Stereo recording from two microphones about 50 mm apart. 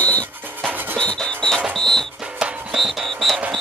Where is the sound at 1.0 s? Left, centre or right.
Centre.